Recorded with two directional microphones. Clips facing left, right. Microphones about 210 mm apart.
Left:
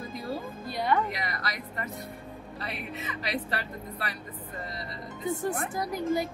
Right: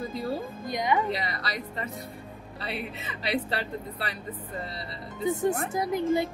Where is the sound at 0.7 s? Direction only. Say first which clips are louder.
Right 1 dB; 15° right (ahead or behind).